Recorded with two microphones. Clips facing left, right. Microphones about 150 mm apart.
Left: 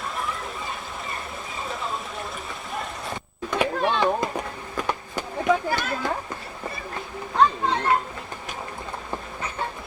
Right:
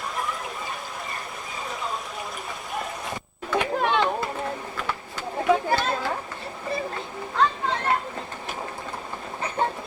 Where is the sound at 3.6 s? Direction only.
15° left (ahead or behind).